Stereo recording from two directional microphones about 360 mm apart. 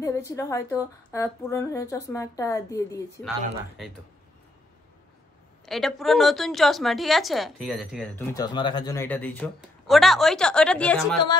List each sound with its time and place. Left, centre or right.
0.0 s a woman's voice: centre
5.7 s a woman's voice: centre